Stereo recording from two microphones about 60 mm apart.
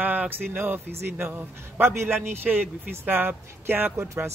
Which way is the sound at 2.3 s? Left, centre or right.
Right.